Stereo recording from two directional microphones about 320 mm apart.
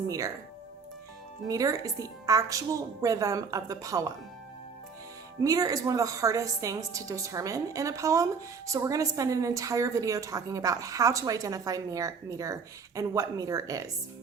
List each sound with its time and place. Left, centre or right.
0.1 s a woman's voice: centre
1.5 s a woman's voice: centre
5.4 s a woman's voice: centre